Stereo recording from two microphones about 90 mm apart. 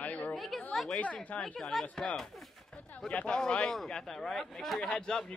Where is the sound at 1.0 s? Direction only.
15° left (ahead or behind).